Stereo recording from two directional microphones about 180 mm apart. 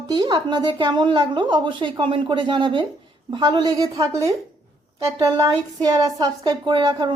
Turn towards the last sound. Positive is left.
turn(degrees=-25)  # may be behind; listen again after turning